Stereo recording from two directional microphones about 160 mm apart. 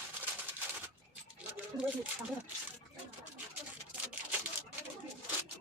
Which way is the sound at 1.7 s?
10° right (ahead or behind).